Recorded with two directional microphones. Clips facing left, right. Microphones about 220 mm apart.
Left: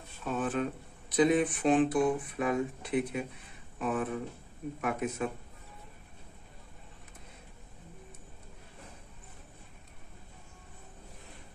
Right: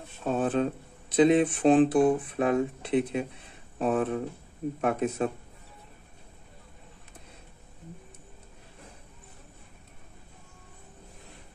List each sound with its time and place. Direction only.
0.2 s speech: 30° right (ahead or behind)